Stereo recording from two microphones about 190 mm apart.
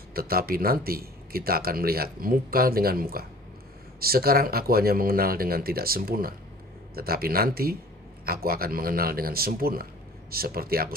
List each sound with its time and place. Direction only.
0.1 s a man's voice: 50° right (ahead or behind)